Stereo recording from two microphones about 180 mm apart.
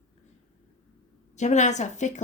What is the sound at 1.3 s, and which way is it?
Speech, 40° left (ahead or behind).